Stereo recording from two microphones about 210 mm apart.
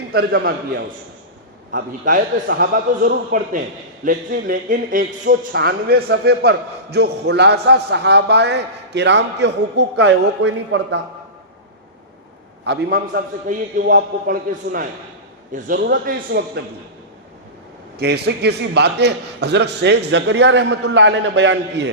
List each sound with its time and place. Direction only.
0.1 s speech: 50° right (ahead or behind)
1.7 s speech: 45° right (ahead or behind); by 11.0 s 60° right (ahead or behind)
12.6 s speech: 50° right (ahead or behind)
17.9 s a man's voice: 50° right (ahead or behind)